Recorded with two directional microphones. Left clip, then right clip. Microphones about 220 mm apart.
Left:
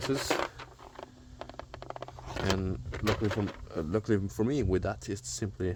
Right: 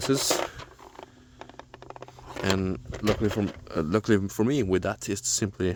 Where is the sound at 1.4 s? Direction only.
10° right (ahead or behind).